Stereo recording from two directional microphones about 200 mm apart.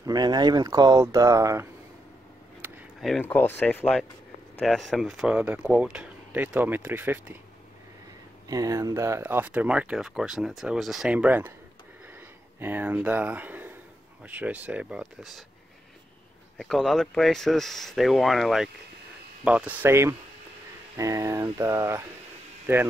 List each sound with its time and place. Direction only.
0.0 s speech: 20° right (ahead or behind)
2.6 s a sound: centre (ahead or behind)
3.3 s speech: 10° left (ahead or behind); by 7.3 s 10° right (ahead or behind)
8.5 s speech: 15° right (ahead or behind)
12.5 s speech: 10° right (ahead or behind)
16.5 s speech: centre (ahead or behind)